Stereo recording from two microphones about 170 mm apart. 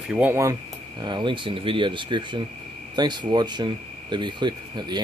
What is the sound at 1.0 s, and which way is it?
Speech, 25° right (ahead or behind).